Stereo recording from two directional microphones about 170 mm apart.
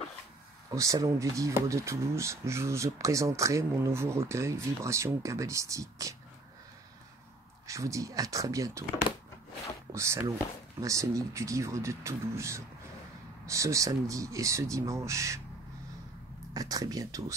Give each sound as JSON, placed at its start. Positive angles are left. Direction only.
{"t": 0.7, "sound": "speech", "side_deg": -20}
{"t": 7.6, "sound": "speech", "side_deg": -20}
{"t": 9.9, "sound": "speech", "side_deg": -15}
{"t": 16.5, "sound": "speech", "side_deg": -20}